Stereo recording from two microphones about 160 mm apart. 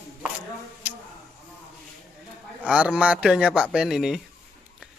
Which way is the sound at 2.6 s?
5° right (ahead or behind).